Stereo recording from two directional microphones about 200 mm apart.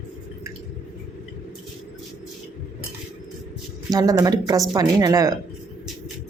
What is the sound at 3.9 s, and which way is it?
Speech, 20° right (ahead or behind).